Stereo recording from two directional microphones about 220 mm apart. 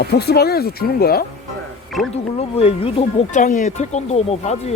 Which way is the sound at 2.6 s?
25° left (ahead or behind).